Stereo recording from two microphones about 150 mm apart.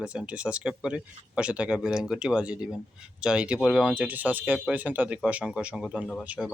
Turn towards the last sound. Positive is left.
turn(degrees=-10)  # may be behind; listen again after turning